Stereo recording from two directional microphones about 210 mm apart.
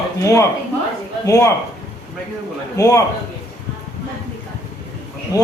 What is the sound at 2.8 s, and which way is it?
Speech, 15° left (ahead or behind).